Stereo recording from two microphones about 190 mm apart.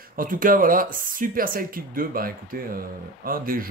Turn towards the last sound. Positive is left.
turn(degrees=-50)  # may be behind; listen again after turning